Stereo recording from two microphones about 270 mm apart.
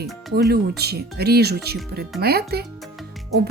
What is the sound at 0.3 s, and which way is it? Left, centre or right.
Speech, right.